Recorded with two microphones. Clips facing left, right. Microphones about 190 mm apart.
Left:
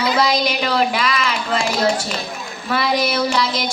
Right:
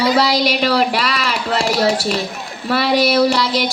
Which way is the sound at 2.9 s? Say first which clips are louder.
Right 4 dB; 70° right (ahead or behind).